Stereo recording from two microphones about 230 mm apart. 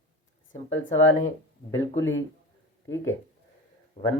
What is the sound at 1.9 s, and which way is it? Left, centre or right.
Speech, left.